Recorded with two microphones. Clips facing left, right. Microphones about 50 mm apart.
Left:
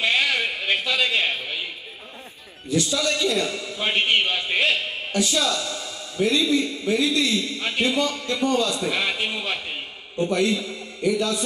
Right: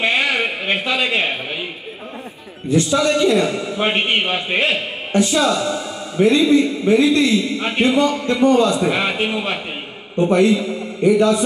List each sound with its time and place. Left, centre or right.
0.0 s a sound: right
2.7 s a man's voice: right
11.0 s a man's voice: right